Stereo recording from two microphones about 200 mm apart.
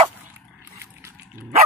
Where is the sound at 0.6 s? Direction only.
15° right (ahead or behind).